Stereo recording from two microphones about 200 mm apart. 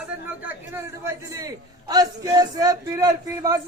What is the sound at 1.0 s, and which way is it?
A man's voice, 15° right (ahead or behind).